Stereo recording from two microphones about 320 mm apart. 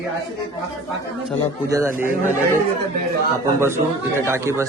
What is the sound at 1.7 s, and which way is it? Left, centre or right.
Speech, centre.